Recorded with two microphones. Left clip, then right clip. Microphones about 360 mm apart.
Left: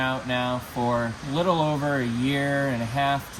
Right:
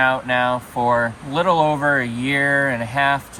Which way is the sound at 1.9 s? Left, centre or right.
Centre.